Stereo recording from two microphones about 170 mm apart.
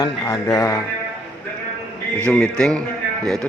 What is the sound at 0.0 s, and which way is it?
Speech, 20° left (ahead or behind).